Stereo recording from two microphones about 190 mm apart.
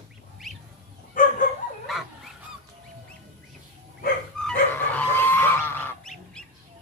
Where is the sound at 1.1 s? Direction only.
45° left (ahead or behind).